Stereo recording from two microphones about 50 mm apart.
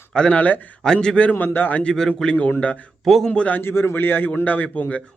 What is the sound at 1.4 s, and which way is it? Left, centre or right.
Speech, left.